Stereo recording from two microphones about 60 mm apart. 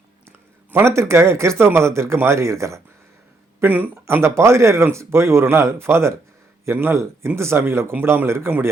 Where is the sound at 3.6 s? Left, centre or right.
Right.